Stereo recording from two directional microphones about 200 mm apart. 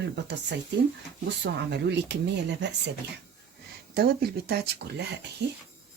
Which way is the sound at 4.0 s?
50° right (ahead or behind).